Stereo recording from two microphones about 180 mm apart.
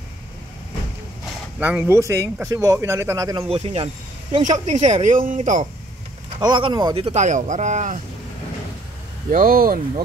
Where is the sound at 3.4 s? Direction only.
35° right (ahead or behind).